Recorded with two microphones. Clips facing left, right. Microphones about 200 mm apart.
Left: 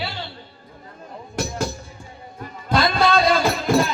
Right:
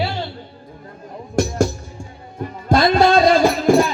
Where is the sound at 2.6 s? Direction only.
45° right (ahead or behind).